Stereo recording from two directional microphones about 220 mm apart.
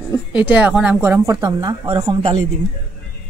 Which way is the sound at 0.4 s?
5° right (ahead or behind).